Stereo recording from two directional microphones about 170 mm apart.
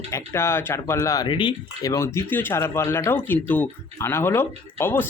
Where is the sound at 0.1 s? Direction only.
15° left (ahead or behind).